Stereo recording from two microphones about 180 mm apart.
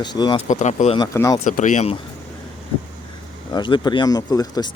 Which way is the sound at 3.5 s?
25° left (ahead or behind).